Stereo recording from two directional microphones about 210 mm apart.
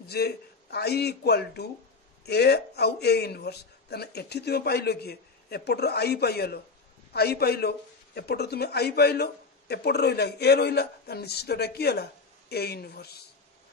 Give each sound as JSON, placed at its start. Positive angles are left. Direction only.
{"t": 0.1, "sound": "speech", "side_deg": 50}